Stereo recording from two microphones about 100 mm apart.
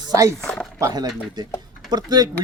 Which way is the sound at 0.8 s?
35° right (ahead or behind).